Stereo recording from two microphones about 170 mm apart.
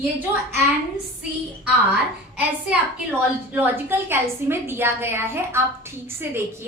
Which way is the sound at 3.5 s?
10° right (ahead or behind).